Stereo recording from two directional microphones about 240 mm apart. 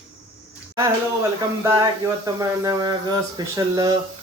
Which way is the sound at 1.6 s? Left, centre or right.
Centre.